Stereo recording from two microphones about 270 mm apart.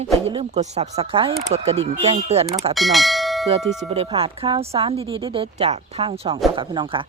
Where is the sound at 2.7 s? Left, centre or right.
Centre.